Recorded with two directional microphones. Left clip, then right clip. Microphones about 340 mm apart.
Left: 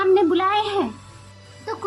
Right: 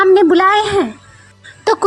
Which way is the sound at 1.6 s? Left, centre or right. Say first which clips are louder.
Right 16 dB; right.